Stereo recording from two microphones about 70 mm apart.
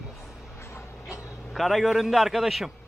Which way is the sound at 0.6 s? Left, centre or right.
Left.